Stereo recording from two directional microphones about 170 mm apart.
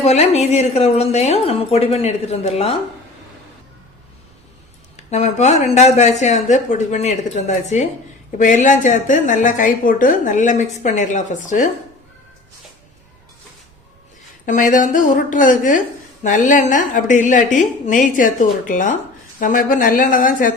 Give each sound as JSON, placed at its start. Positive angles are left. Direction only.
{"t": 0.0, "sound": "a woman's voice", "side_deg": 40}
{"t": 4.9, "sound": "a woman's voice", "side_deg": 40}
{"t": 14.4, "sound": "a woman's voice", "side_deg": 50}